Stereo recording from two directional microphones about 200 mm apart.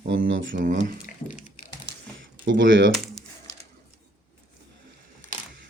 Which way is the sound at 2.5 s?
70° right (ahead or behind).